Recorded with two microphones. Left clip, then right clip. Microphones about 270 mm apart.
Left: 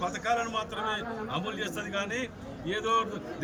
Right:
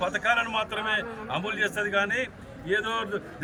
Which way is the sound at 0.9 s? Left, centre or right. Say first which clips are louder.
Right 4 dB; centre.